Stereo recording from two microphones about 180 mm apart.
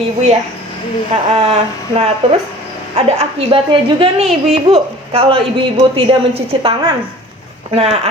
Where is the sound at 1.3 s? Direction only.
35° right (ahead or behind).